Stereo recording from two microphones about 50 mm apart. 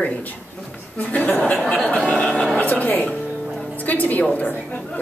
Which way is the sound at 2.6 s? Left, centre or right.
Left.